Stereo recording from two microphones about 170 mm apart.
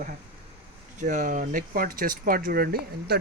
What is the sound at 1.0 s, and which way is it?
Speech, 45° right (ahead or behind).